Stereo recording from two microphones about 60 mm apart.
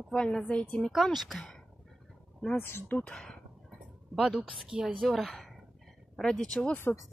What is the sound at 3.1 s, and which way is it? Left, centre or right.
Speech, centre.